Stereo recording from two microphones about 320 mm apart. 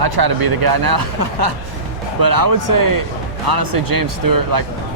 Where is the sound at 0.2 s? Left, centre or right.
Right.